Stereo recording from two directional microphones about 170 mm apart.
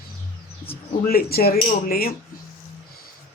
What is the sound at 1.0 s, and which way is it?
Cutlery, 60° left (ahead or behind).